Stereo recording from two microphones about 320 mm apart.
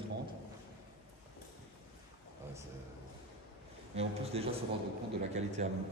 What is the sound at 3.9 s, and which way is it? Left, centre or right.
A man's voice, centre.